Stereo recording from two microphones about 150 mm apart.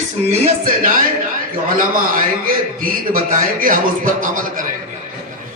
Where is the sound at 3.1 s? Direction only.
65° right (ahead or behind).